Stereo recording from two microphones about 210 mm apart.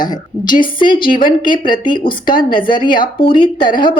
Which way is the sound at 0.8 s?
20° left (ahead or behind).